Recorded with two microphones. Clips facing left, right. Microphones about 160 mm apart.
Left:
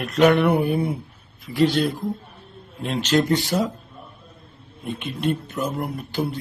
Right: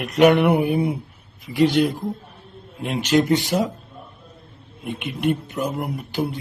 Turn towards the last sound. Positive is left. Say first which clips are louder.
# right 1 dB
turn(degrees=-20)  # may be behind; listen again after turning